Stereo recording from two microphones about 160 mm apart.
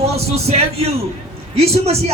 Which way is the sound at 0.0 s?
40° right (ahead or behind).